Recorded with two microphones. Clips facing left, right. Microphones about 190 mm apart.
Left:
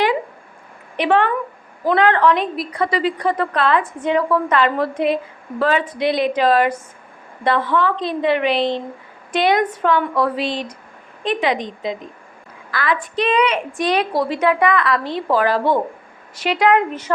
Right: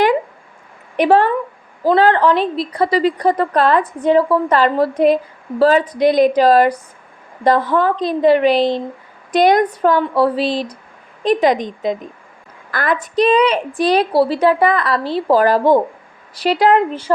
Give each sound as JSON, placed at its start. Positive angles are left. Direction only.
{"t": 0.9, "sound": "a woman's voice", "side_deg": -40}